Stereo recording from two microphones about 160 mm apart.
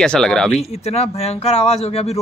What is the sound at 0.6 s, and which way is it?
Speech, 40° left (ahead or behind).